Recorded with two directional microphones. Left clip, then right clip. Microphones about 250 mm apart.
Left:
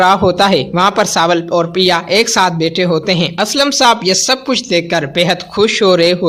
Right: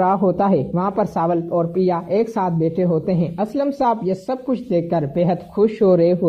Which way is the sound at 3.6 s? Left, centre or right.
Left.